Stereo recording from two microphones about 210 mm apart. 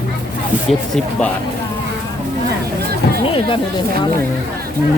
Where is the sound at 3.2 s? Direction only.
25° left (ahead or behind).